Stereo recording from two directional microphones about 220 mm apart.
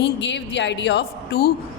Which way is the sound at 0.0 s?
55° left (ahead or behind).